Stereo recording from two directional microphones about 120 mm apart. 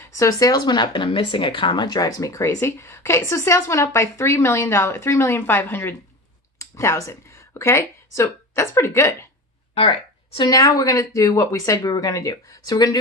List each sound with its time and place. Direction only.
0.0 s speech: 25° left (ahead or behind)
10.3 s speech: 30° left (ahead or behind)